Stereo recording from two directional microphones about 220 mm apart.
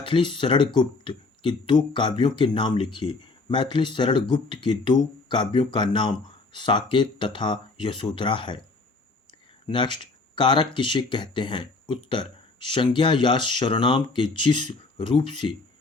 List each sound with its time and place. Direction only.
0.0 s speech: 20° left (ahead or behind)
9.6 s speech: 20° left (ahead or behind)